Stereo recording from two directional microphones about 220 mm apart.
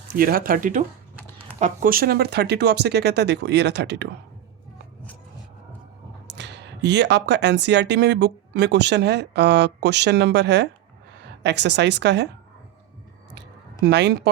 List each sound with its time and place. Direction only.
0.1 s speech: 40° right (ahead or behind)
6.3 s speech: 50° right (ahead or behind)
13.8 s speech: 50° right (ahead or behind)